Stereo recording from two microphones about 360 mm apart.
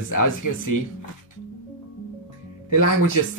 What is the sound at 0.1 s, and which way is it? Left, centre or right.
Speech, left.